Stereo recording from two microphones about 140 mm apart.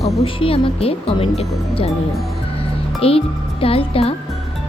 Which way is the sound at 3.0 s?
45° left (ahead or behind).